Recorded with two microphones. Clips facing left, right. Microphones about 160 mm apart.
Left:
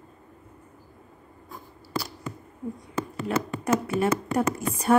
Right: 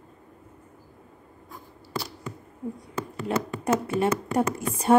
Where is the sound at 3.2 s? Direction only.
30° right (ahead or behind).